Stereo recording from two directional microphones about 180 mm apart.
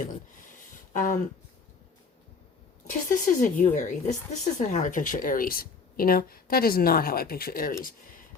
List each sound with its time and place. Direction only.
0.9 s speech: 45° left (ahead or behind)
2.9 s speech: 45° left (ahead or behind)